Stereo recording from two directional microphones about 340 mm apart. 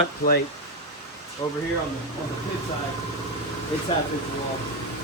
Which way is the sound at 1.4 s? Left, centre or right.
Centre.